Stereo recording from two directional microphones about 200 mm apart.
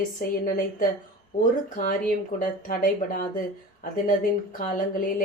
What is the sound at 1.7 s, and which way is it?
Speech, 45° left (ahead or behind).